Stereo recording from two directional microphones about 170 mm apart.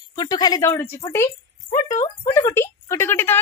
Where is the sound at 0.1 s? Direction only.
25° left (ahead or behind).